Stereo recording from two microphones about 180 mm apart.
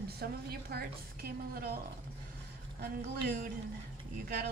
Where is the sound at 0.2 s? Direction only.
60° right (ahead or behind).